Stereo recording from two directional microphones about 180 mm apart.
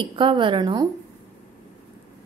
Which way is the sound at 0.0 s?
30° right (ahead or behind).